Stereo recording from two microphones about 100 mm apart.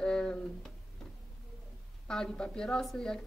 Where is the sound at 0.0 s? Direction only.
10° left (ahead or behind).